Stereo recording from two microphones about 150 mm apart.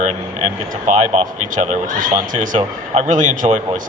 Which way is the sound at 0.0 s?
55° right (ahead or behind).